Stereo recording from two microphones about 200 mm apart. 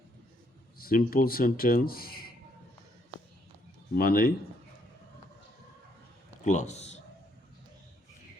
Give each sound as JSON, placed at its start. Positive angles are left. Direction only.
{"t": 0.8, "sound": "speech", "side_deg": 45}
{"t": 3.9, "sound": "speech", "side_deg": 45}
{"t": 6.4, "sound": "a man's voice", "side_deg": 35}